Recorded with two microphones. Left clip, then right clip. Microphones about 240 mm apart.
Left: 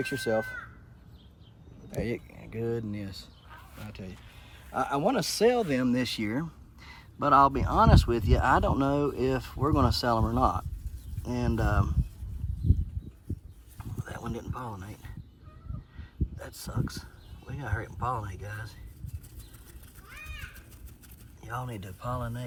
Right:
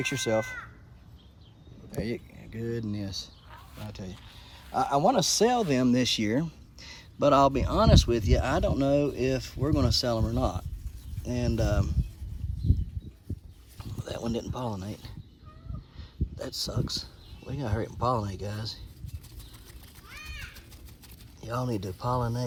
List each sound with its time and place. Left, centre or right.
0.1 s speech: right
2.0 s speech: left
2.9 s speech: centre
13.7 s speech: centre
16.4 s speech: centre
21.4 s speech: centre